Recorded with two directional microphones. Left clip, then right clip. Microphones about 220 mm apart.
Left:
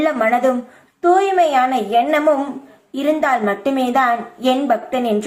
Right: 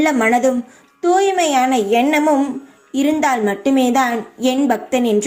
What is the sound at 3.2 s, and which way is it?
A woman's voice, 35° right (ahead or behind).